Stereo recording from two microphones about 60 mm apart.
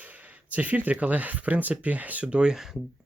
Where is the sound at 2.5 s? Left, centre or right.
Centre.